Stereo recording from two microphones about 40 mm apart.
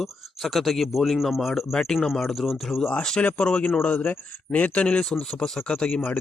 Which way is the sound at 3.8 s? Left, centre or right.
Left.